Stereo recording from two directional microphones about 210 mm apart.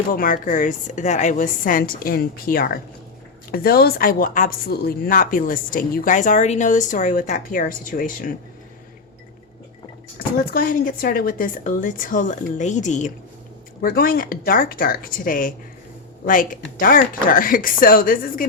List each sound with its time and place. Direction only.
0.1 s speech: 40° left (ahead or behind)
10.2 s speech: 45° left (ahead or behind)
13.8 s speech: 45° left (ahead or behind)